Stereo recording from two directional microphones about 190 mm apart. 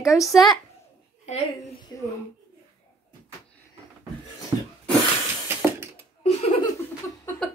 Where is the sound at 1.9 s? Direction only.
15° left (ahead or behind).